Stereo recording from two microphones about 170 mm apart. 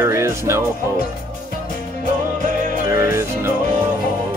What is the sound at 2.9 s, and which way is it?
Music, 15° right (ahead or behind).